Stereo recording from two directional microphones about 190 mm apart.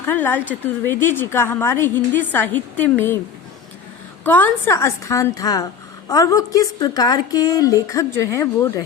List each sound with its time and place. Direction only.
0.0 s speech: 10° left (ahead or behind)
4.2 s speech: 10° left (ahead or behind)